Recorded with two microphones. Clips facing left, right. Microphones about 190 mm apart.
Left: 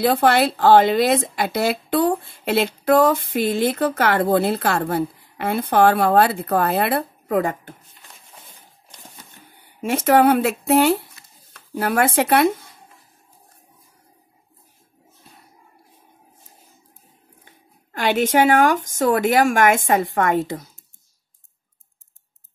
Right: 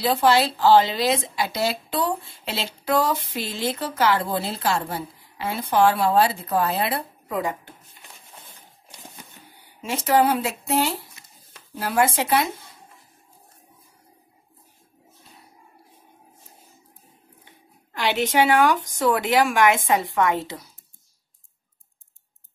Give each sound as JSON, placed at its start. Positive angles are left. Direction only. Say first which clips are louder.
{"t": 0.0, "sound": "speech", "louder": "left 3 dB", "side_deg": 55}
{"t": 9.8, "sound": "speech", "louder": "left 4 dB", "side_deg": 55}
{"t": 17.9, "sound": "speech", "louder": "left 3 dB", "side_deg": 50}